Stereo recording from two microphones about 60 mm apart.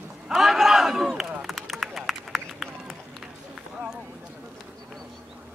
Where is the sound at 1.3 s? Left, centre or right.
Centre.